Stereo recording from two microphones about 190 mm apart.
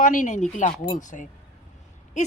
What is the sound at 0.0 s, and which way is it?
A woman's voice, 45° left (ahead or behind).